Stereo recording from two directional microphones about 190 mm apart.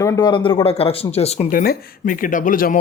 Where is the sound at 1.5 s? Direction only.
50° left (ahead or behind).